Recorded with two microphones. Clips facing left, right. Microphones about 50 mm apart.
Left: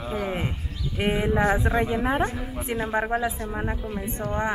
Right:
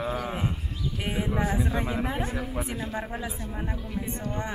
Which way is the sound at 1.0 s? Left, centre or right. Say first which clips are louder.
Left 7 dB; left.